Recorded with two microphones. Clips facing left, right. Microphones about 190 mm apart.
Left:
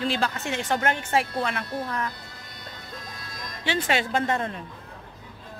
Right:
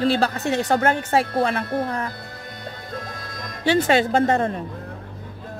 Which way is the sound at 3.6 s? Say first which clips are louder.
Right 8 dB; 40° right (ahead or behind).